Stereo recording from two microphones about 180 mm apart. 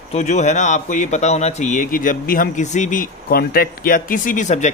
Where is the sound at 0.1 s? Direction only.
40° left (ahead or behind).